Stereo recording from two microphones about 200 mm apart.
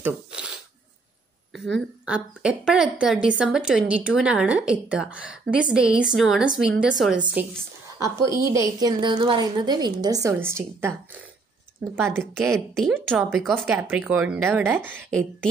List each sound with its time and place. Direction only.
0.0 s shuffling cards: 5° right (ahead or behind)
1.5 s a woman's voice: centre (ahead or behind)
8.0 s a woman's voice: 15° right (ahead or behind)